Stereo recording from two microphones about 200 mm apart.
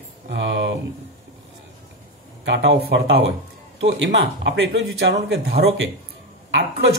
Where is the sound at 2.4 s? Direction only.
60° right (ahead or behind).